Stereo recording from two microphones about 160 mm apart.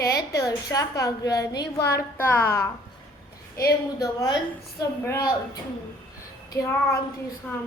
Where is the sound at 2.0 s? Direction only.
15° left (ahead or behind).